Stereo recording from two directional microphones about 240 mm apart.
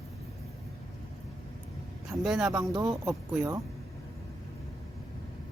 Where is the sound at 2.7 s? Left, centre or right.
Centre.